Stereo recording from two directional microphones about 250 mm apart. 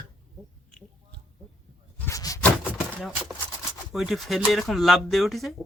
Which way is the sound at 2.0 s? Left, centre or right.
Centre.